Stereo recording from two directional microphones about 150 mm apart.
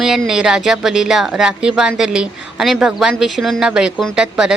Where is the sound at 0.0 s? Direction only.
5° right (ahead or behind).